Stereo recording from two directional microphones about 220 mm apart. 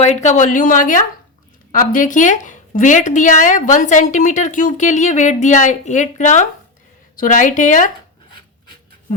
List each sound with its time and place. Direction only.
0.0 s a woman's voice: 30° left (ahead or behind)
8.3 s filing: 20° left (ahead or behind)